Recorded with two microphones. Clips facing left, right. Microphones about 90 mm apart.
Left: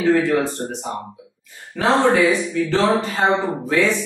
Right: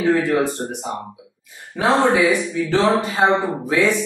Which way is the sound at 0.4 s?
15° right (ahead or behind).